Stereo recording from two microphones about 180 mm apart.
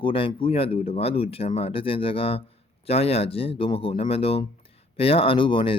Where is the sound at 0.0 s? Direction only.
30° left (ahead or behind).